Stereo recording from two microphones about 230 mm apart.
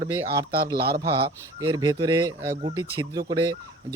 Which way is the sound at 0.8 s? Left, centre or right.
Right.